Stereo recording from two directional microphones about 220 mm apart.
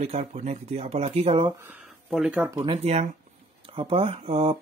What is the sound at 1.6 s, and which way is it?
Speech, 5° right (ahead or behind).